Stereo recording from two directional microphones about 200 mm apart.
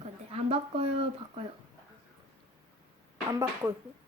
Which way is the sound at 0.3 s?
30° right (ahead or behind).